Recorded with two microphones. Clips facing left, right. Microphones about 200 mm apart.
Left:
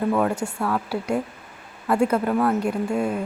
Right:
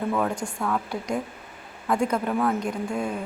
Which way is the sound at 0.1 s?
5° left (ahead or behind).